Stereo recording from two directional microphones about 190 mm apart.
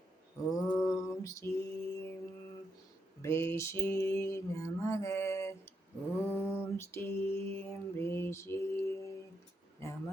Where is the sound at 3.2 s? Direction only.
15° left (ahead or behind).